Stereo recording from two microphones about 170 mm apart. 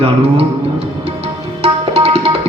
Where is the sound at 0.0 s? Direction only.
35° right (ahead or behind).